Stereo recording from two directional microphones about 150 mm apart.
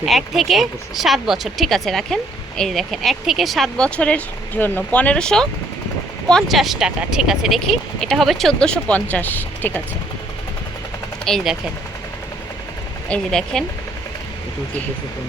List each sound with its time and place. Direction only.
0.0 s speech: centre (ahead or behind)
11.3 s speech: centre (ahead or behind)
13.1 s speech: 5° left (ahead or behind)